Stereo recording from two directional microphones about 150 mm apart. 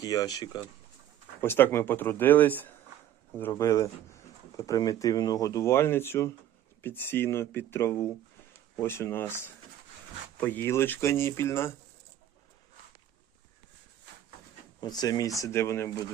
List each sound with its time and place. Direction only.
0.0 s speech: 25° left (ahead or behind)
1.4 s speech: 15° left (ahead or behind)
10.4 s speech: 15° left (ahead or behind)
14.8 s speech: 25° left (ahead or behind)